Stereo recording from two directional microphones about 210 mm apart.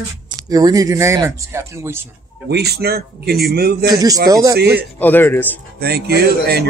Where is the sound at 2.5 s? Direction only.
50° right (ahead or behind).